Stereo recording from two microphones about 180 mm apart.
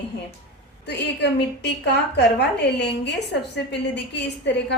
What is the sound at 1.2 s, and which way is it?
A woman's voice, 70° left (ahead or behind).